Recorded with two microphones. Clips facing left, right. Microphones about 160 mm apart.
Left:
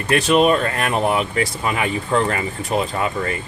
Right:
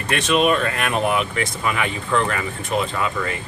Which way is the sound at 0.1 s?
35° left (ahead or behind).